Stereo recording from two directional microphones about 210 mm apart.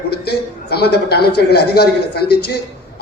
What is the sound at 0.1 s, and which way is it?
A man's voice, 50° left (ahead or behind).